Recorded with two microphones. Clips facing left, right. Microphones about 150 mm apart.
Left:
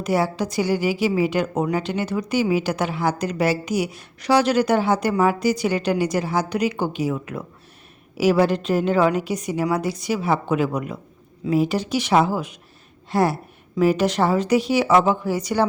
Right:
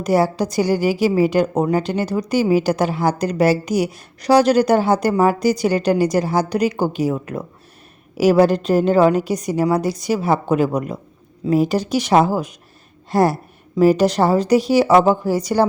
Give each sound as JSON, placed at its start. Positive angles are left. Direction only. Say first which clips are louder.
{"t": 0.0, "sound": "a woman's voice", "louder": "right 4 dB", "side_deg": -40}